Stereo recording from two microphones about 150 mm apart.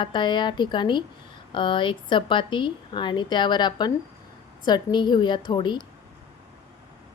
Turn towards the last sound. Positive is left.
turn(degrees=30)  # may be behind; listen again after turning